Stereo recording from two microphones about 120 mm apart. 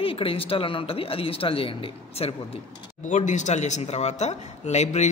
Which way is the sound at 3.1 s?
90° left.